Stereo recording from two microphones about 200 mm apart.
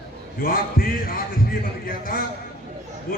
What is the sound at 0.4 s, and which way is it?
A man's voice, 45° left (ahead or behind).